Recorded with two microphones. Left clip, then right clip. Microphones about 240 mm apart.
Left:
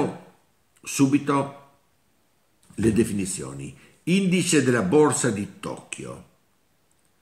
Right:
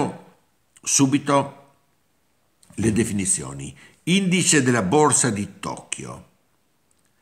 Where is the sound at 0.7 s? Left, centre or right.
Right.